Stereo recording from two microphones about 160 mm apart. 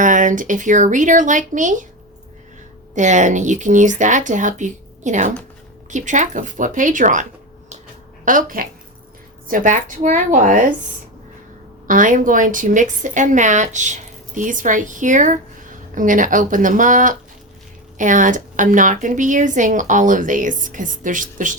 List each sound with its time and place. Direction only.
0.0 s a woman's voice: 55° right (ahead or behind)
2.9 s a woman's voice: 50° right (ahead or behind)
11.9 s a woman's voice: 55° right (ahead or behind)